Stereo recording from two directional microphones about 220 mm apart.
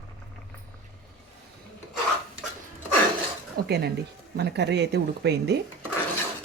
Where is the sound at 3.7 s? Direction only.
45° right (ahead or behind).